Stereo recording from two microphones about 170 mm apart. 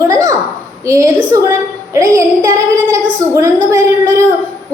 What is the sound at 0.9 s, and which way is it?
A woman's voice, 15° right (ahead or behind).